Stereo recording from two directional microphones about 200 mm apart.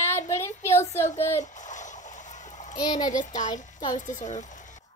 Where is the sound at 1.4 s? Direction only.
40° left (ahead or behind).